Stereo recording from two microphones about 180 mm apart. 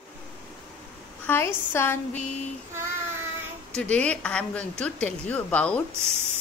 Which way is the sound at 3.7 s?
5° left (ahead or behind).